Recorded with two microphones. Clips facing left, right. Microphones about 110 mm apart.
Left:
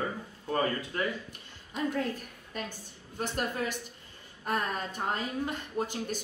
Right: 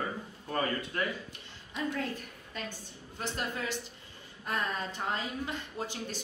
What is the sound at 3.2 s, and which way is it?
Speech, 50° left (ahead or behind).